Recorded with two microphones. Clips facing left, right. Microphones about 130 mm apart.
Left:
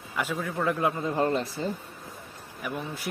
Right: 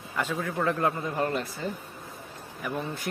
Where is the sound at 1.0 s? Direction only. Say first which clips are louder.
Left 3 dB; 25° left (ahead or behind).